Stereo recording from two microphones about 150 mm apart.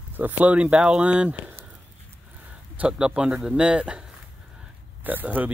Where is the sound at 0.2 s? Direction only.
10° right (ahead or behind).